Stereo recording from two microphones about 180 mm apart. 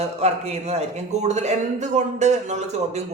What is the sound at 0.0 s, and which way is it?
Speech, 35° right (ahead or behind).